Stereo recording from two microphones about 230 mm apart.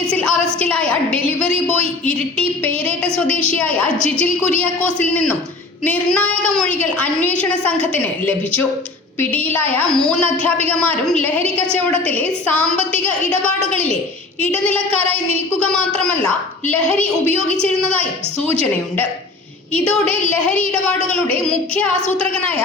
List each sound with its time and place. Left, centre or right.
0.2 s a sound: centre
2.6 s a woman's voice: centre
5.8 s a woman's voice: centre
9.3 s a woman's voice: centre
14.6 s a woman's voice: centre
20.1 s a woman's voice: centre
21.1 s a woman's voice: right
22.2 s a woman's voice: centre